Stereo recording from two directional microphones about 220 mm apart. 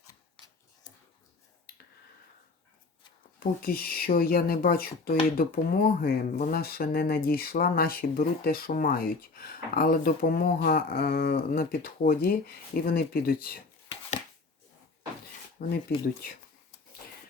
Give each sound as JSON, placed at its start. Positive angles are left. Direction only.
{"t": 0.0, "sound": "scissors", "side_deg": 15}
{"t": 3.4, "sound": "speech", "side_deg": 40}
{"t": 15.6, "sound": "speech", "side_deg": 45}